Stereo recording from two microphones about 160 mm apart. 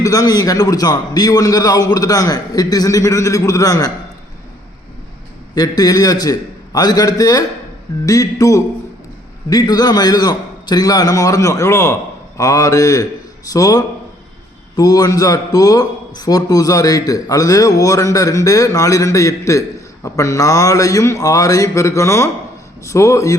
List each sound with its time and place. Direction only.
0.0 s a man's voice: 20° left (ahead or behind)
5.5 s a man's voice: 25° left (ahead or behind)